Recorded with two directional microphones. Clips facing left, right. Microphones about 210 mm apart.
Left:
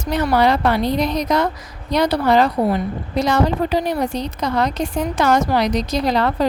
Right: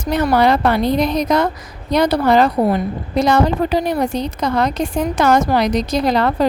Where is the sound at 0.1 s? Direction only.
50° right (ahead or behind).